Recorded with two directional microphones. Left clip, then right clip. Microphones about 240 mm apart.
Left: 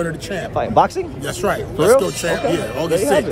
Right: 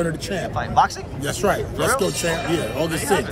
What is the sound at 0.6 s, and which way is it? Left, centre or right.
Speech, left.